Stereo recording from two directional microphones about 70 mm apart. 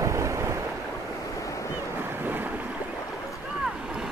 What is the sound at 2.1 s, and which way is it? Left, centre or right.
Boat, right.